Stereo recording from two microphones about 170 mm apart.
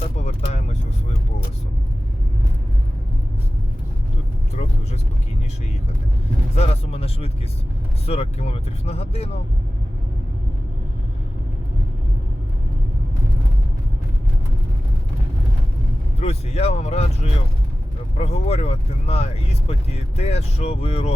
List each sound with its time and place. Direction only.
0.2 s vehicle: 40° left (ahead or behind)
4.5 s vehicle: 40° left (ahead or behind)
6.6 s vehicle: 35° left (ahead or behind)
8.0 s speech: 35° left (ahead or behind)
16.2 s speech: 40° left (ahead or behind)